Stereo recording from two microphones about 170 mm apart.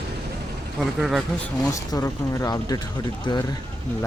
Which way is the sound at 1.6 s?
20° left (ahead or behind).